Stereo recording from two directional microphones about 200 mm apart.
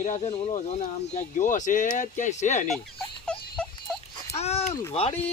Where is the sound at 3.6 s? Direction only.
5° left (ahead or behind).